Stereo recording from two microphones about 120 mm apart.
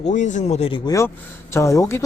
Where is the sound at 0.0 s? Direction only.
90° left; by 0.7 s 65° left (ahead or behind).